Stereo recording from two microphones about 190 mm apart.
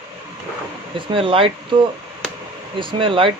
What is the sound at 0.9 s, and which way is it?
Speech, 25° right (ahead or behind).